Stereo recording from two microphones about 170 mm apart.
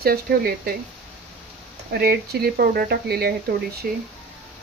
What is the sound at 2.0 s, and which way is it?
Speech, 65° right (ahead or behind).